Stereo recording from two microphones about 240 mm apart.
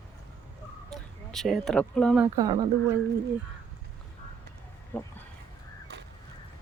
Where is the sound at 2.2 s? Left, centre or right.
Centre.